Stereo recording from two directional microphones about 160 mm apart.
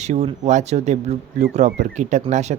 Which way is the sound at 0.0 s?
45° right (ahead or behind).